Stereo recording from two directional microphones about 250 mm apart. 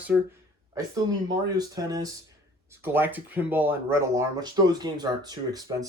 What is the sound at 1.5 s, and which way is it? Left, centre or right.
Speech, centre.